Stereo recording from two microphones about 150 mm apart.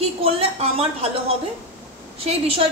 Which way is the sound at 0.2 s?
40° right (ahead or behind).